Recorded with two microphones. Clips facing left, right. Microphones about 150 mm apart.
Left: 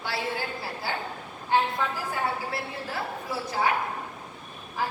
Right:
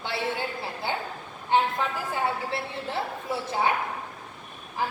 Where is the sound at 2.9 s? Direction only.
25° right (ahead or behind).